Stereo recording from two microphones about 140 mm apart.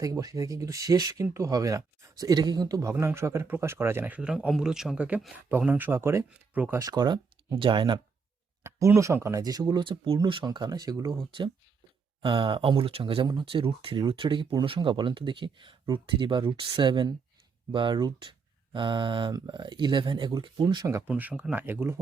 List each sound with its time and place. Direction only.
0.0 s speech: 25° right (ahead or behind)
2.9 s speech: 15° right (ahead or behind)
6.7 s speech: 30° right (ahead or behind)
8.6 s speech: 20° right (ahead or behind)
11.3 s speech: 40° right (ahead or behind)
21.1 s speech: 10° right (ahead or behind)